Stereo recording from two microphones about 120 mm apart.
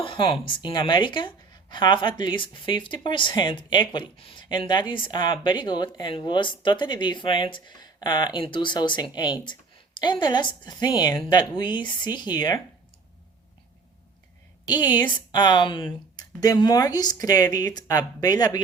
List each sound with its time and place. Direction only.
0.0 s speech: 45° left (ahead or behind)
14.8 s speech: 35° left (ahead or behind)